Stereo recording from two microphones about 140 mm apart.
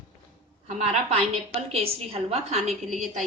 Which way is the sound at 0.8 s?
50° right (ahead or behind).